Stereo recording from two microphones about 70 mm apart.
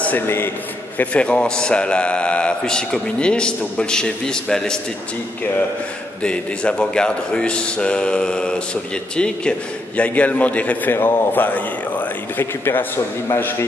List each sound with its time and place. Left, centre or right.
0.0 s a man's voice: left; by 4.7 s centre
6.2 s a man's voice: centre
10.9 s a man's voice: left